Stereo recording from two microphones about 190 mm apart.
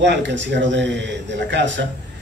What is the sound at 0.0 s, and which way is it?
A man's voice, 70° right (ahead or behind).